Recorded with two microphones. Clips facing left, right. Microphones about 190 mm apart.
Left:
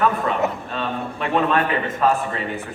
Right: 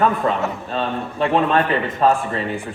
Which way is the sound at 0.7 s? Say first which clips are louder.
Right 7 dB; 30° right (ahead or behind).